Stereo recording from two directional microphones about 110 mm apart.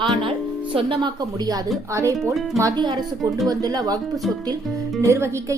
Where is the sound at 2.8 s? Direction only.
40° right (ahead or behind).